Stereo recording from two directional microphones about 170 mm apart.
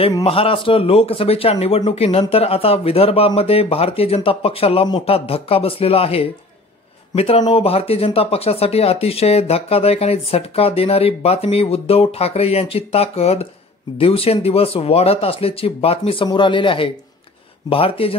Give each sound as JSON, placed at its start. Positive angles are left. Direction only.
{"t": 0.2, "sound": "speech", "side_deg": 35}